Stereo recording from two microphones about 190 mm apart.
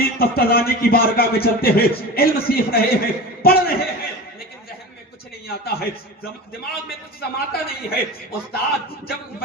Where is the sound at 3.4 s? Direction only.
55° left (ahead or behind).